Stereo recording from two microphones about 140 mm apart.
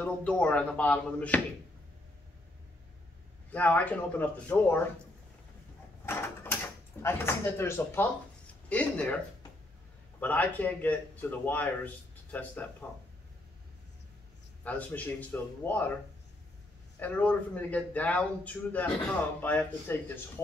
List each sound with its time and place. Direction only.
0.0 s a man's voice: 10° left (ahead or behind)
3.5 s a man's voice: 10° left (ahead or behind)
6.0 s mechanisms: 15° left (ahead or behind)
8.6 s a man's voice: 10° left (ahead or behind)
10.2 s a man's voice: 10° left (ahead or behind)
14.6 s a man's voice: 10° left (ahead or behind)
17.0 s a man's voice: 10° left (ahead or behind)